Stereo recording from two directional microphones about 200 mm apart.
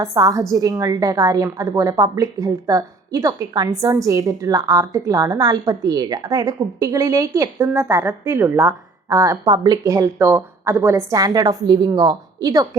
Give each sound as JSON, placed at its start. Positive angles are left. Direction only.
{"t": 0.0, "sound": "a woman's voice", "side_deg": -15}